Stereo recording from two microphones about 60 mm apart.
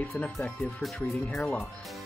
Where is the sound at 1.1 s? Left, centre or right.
Centre.